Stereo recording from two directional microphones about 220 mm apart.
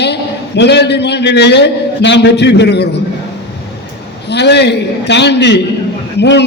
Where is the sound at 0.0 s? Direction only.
50° left (ahead or behind).